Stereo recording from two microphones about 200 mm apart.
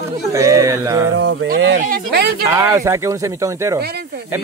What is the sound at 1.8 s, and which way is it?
Speech, 45° right (ahead or behind).